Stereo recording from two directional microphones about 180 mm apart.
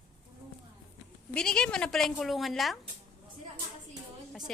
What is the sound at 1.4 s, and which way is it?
A woman's voice, 5° left (ahead or behind).